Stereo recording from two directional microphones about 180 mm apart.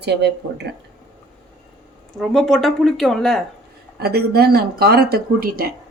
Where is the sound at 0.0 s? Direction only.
70° right (ahead or behind).